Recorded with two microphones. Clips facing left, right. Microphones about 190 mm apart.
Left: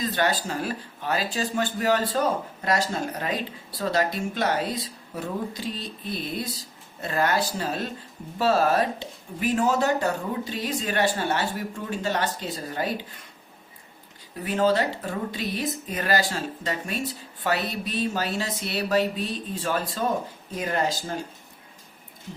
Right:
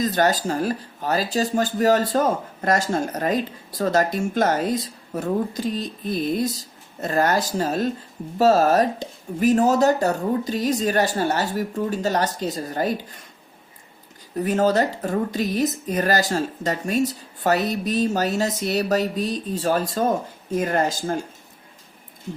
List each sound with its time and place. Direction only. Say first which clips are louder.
0.0 s speech: right 5 dB; 40° right (ahead or behind)
14.3 s speech: right 3 dB; 45° right (ahead or behind)